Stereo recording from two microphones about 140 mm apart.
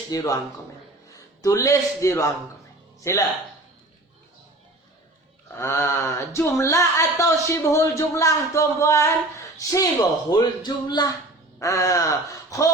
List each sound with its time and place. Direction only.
0.1 s speech: 25° left (ahead or behind)
5.5 s speech: 20° left (ahead or behind)